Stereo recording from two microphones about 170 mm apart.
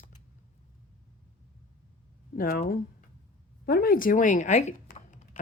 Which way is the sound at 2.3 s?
60° left (ahead or behind).